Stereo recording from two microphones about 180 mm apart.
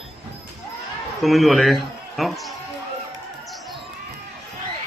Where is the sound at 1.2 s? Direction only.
Centre (ahead or behind).